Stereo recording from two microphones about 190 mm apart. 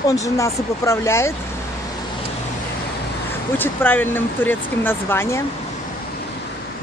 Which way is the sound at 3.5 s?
10° left (ahead or behind).